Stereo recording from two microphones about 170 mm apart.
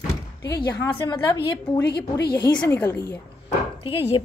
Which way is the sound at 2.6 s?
15° left (ahead or behind).